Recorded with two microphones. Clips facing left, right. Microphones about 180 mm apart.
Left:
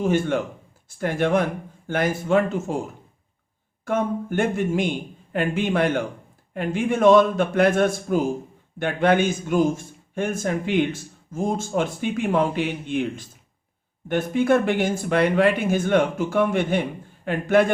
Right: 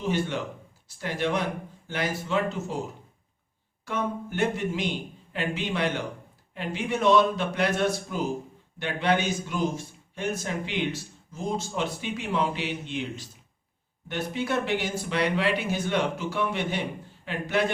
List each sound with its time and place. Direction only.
0.0 s a man's voice: 50° left (ahead or behind)